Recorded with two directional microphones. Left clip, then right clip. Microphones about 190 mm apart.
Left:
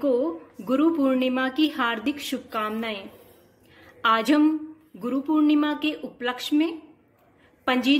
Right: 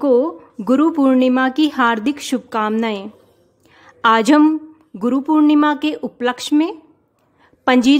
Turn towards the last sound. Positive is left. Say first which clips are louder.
# right 9 dB
turn(degrees=-70)  # may be behind; listen again after turning